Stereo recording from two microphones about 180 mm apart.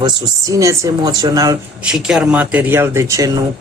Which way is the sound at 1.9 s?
5° right (ahead or behind).